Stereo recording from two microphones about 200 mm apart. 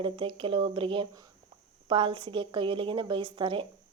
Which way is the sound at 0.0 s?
25° right (ahead or behind).